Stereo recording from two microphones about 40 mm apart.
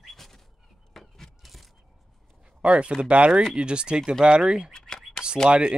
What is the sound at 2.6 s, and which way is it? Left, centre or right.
Speech, right.